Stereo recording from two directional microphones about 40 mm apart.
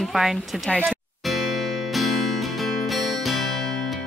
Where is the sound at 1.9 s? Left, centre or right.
Centre.